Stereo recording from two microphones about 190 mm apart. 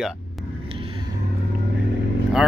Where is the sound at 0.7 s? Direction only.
30° right (ahead or behind).